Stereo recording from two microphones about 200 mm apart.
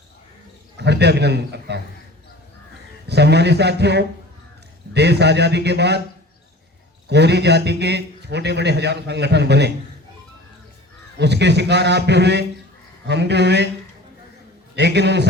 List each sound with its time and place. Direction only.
0.8 s a man's voice: 55° right (ahead or behind)
3.1 s a man's voice: 55° right (ahead or behind)
7.1 s a man's voice: 55° right (ahead or behind)
11.2 s a man's voice: 60° right (ahead or behind)
14.8 s a man's voice: 60° right (ahead or behind)